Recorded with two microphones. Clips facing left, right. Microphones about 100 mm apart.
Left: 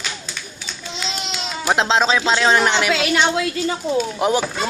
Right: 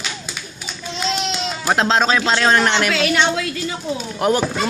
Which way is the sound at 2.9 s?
20° left (ahead or behind).